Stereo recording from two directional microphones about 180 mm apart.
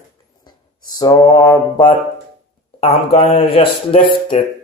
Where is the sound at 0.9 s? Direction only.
20° left (ahead or behind).